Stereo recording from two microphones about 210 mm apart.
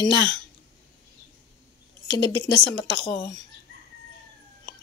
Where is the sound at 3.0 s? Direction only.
25° left (ahead or behind).